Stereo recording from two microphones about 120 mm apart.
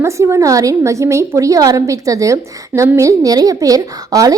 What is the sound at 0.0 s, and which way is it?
A woman's voice, 25° right (ahead or behind).